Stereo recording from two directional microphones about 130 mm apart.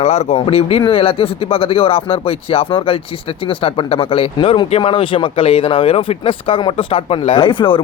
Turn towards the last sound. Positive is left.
turn(degrees=40)  # may be behind; listen again after turning